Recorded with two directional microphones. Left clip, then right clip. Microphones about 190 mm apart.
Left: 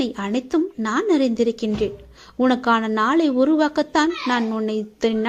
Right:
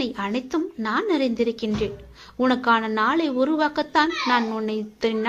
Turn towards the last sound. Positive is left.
turn(degrees=40)  # may be behind; listen again after turning